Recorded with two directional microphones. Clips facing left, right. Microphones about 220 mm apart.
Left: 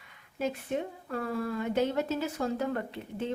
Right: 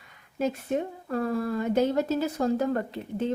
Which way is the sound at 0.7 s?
45° right (ahead or behind).